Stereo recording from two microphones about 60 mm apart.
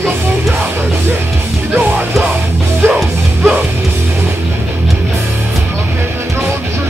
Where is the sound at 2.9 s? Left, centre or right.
Centre.